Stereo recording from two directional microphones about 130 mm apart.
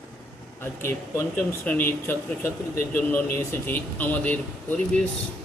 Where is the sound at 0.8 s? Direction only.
20° left (ahead or behind).